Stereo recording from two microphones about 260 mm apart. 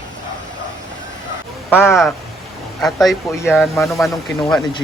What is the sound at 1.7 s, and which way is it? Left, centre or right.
Speech, centre.